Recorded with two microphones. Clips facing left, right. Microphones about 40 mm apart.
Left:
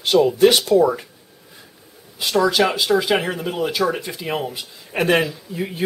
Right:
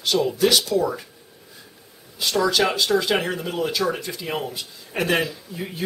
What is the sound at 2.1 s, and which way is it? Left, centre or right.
Speech, centre.